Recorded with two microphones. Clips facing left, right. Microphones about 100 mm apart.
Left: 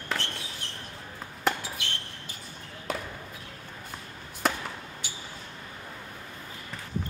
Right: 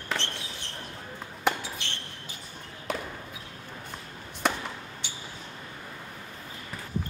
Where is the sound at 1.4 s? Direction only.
Centre (ahead or behind).